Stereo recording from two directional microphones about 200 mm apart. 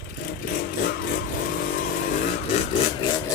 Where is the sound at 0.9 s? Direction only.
45° left (ahead or behind).